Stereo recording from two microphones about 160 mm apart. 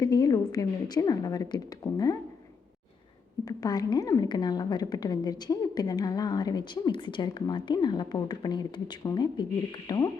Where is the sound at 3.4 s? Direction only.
25° left (ahead or behind).